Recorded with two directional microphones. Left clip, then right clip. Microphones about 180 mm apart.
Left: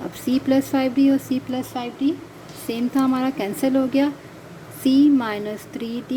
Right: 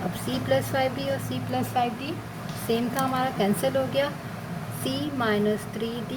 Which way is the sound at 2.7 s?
50° left (ahead or behind).